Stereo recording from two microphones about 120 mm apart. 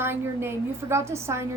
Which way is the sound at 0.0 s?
20° right (ahead or behind).